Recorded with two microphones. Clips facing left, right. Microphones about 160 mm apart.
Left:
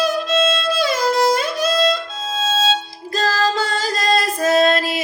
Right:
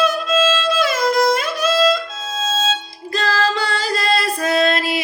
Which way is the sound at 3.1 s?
45° left (ahead or behind).